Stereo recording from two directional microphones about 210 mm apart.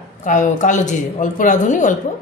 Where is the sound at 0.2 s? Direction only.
35° left (ahead or behind).